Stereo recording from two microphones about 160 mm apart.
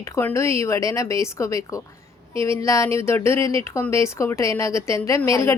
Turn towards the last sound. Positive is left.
turn(degrees=20)  # may be behind; listen again after turning